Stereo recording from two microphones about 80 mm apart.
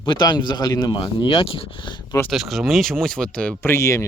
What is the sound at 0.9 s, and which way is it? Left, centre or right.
Speech, left.